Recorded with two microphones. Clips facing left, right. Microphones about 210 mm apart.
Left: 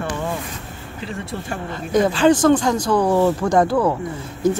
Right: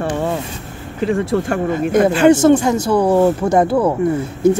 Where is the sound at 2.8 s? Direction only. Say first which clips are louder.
Right 3 dB; 25° right (ahead or behind).